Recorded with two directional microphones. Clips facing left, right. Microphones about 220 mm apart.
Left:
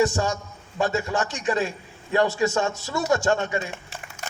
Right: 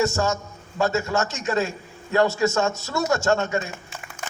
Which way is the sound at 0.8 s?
45° right (ahead or behind).